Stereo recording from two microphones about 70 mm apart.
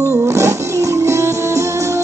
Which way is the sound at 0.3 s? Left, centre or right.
Right.